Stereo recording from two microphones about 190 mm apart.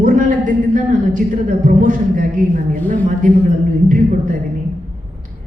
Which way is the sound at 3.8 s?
45° right (ahead or behind).